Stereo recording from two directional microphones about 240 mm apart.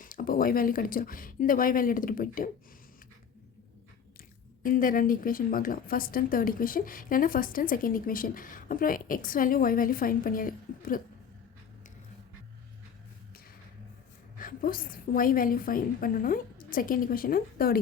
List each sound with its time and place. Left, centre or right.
0.0 s a woman's voice: left
4.6 s a woman's voice: left
14.3 s a woman's voice: left